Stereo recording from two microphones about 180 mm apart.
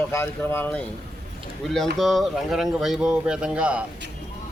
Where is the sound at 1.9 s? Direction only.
Centre (ahead or behind).